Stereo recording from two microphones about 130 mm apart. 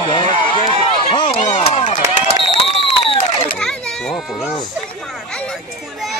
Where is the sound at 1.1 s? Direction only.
40° left (ahead or behind).